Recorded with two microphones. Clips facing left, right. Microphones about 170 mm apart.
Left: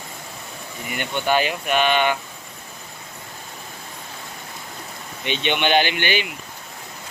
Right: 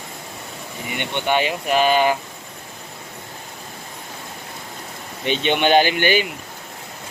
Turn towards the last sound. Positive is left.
turn(degrees=-40)  # may be behind; listen again after turning